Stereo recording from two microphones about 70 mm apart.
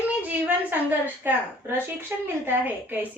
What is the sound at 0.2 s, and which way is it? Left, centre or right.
A woman's voice, right.